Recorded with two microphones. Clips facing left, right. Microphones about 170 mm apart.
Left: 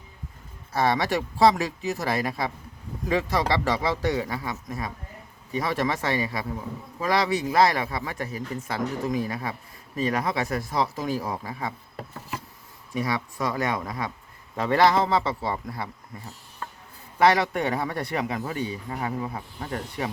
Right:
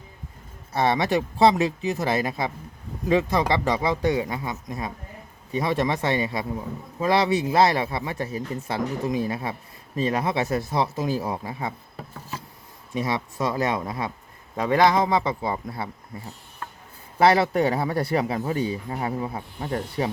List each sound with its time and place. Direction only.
0.8 s a man's voice: 25° right (ahead or behind)
12.9 s a man's voice: 25° right (ahead or behind)
14.5 s a man's voice: 15° right (ahead or behind)
17.2 s speech: 30° right (ahead or behind)